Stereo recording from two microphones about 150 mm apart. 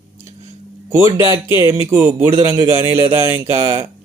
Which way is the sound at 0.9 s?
15° right (ahead or behind).